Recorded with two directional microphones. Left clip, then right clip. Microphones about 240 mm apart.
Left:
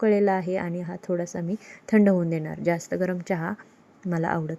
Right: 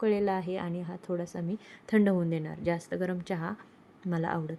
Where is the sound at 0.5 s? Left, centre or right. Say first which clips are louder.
Left 7 dB; centre.